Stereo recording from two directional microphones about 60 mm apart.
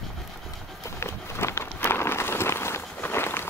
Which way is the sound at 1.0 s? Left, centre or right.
Left.